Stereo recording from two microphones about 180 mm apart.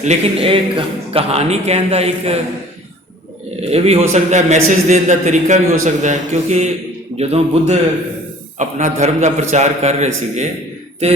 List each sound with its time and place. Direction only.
0.0 s a man's voice: 35° right (ahead or behind)
3.6 s a man's voice: 35° right (ahead or behind)